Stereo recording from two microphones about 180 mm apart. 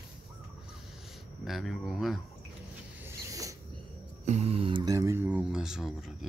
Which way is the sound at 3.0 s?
20° right (ahead or behind).